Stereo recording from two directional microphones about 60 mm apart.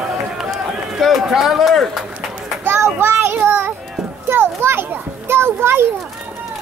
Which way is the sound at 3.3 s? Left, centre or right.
Right.